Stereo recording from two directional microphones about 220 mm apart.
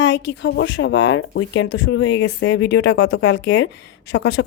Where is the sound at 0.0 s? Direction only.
55° left (ahead or behind).